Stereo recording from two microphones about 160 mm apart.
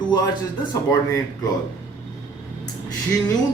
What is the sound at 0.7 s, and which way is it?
Speech, 20° left (ahead or behind).